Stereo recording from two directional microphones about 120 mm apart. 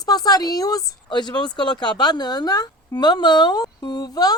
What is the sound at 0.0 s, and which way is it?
A woman's voice, 30° left (ahead or behind).